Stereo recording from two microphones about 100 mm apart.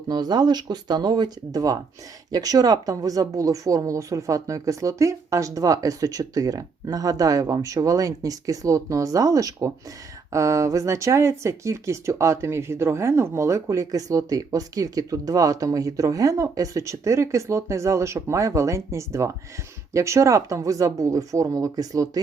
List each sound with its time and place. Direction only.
0.1 s speech: 45° right (ahead or behind)